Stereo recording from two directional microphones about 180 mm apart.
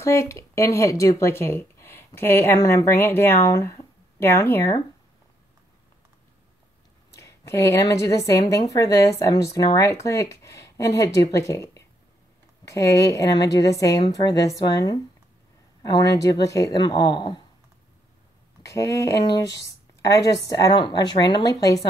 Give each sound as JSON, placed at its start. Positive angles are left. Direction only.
{"t": 0.0, "sound": "speech", "side_deg": 15}
{"t": 7.2, "sound": "speech", "side_deg": 15}
{"t": 18.6, "sound": "speech", "side_deg": 15}